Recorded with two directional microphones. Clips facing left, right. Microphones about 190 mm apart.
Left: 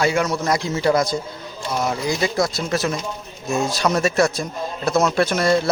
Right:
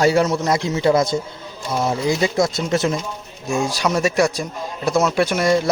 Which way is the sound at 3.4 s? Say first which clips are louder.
Even; 10° right (ahead or behind).